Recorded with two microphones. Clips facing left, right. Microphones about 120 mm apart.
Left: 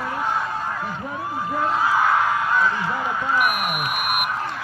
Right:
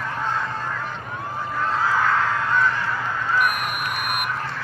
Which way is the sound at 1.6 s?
15° left (ahead or behind).